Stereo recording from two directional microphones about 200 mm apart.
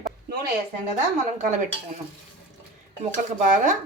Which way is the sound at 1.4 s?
40° right (ahead or behind).